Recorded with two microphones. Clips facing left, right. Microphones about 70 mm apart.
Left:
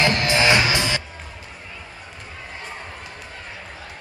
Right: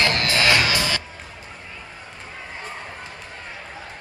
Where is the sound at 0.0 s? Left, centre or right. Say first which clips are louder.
Left 2 dB; left.